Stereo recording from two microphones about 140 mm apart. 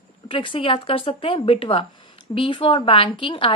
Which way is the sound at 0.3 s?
40° left (ahead or behind).